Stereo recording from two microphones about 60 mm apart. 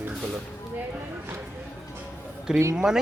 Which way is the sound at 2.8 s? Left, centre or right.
Centre.